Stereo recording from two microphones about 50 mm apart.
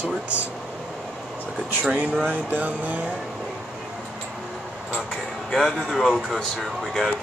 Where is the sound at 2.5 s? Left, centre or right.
Right.